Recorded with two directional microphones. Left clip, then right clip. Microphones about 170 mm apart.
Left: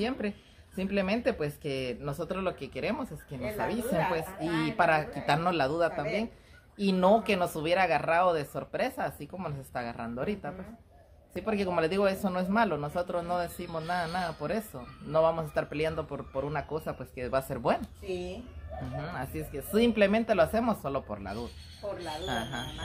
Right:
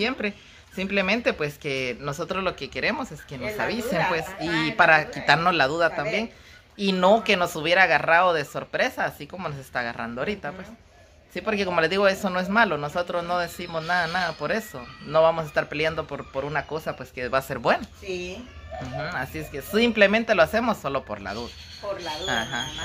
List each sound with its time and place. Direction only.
0.7 s speech: centre (ahead or behind)
18.1 s speech: 15° left (ahead or behind)
18.9 s speech: centre (ahead or behind)